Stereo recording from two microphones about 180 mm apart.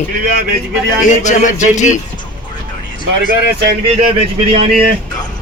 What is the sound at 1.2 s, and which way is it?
Speech, 45° left (ahead or behind).